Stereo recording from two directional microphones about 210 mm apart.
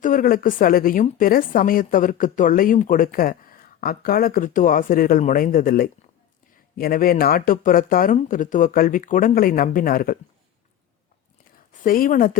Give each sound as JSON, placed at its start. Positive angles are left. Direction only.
{"t": 0.0, "sound": "speech", "side_deg": 40}
{"t": 11.8, "sound": "speech", "side_deg": 40}